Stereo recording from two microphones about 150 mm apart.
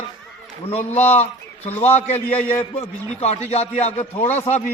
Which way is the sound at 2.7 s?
45° left (ahead or behind).